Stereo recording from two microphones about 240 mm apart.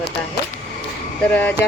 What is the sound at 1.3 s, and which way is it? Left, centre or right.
Speech, centre.